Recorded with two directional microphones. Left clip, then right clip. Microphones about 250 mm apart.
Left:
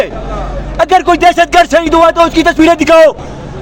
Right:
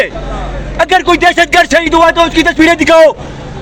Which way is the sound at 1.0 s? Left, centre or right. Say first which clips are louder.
Left 1 dB; centre.